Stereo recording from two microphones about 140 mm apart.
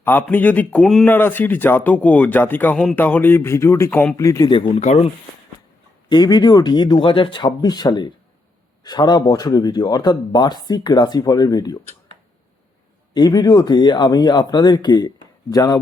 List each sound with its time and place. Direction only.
0.0 s speech: 10° left (ahead or behind)
4.7 s speech: 50° left (ahead or behind)
6.1 s speech: 30° left (ahead or behind)
13.1 s speech: 30° left (ahead or behind)